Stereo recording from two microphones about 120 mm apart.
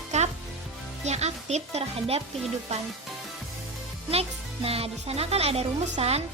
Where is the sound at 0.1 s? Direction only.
70° right (ahead or behind).